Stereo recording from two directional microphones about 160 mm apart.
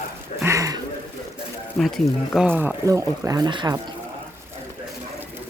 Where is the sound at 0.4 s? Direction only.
20° right (ahead or behind).